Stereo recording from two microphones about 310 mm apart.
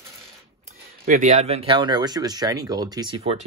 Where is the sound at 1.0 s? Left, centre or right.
Right.